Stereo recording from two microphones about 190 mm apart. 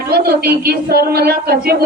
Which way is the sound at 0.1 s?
55° right (ahead or behind).